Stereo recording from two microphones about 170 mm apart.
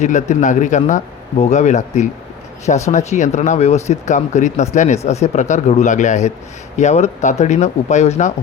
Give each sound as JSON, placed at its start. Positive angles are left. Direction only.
{"t": 0.0, "sound": "speech", "side_deg": 45}